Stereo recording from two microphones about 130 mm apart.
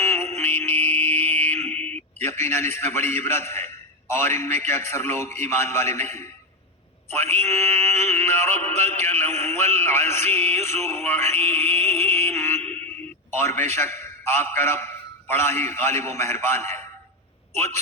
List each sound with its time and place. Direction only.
0.0 s music: 20° left (ahead or behind)
4.1 s synthetic singing: 20° left (ahead or behind)
13.3 s a man's voice: 20° left (ahead or behind)